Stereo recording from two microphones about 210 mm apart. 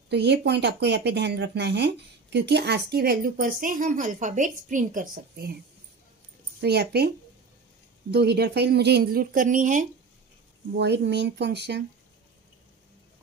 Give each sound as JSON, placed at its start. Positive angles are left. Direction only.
{"t": 0.1, "sound": "speech", "side_deg": -55}
{"t": 6.6, "sound": "speech", "side_deg": -50}
{"t": 8.1, "sound": "speech", "side_deg": -50}
{"t": 10.8, "sound": "speech", "side_deg": -55}